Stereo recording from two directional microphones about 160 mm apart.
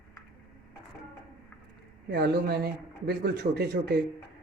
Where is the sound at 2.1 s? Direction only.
90° right.